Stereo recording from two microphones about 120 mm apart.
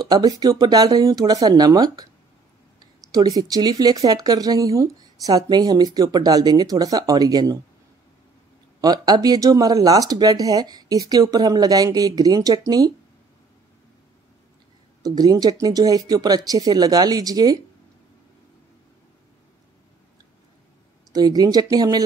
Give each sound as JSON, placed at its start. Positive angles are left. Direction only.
{"t": 0.1, "sound": "speech", "side_deg": -35}
{"t": 8.8, "sound": "speech", "side_deg": -35}
{"t": 15.0, "sound": "speech", "side_deg": -35}
{"t": 21.1, "sound": "speech", "side_deg": -35}